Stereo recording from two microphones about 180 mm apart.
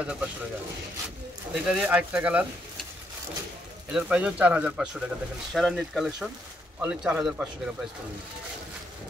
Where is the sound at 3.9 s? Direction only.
5° right (ahead or behind).